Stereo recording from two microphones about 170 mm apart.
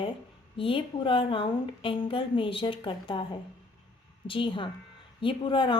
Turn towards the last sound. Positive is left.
turn(degrees=30)  # may be behind; listen again after turning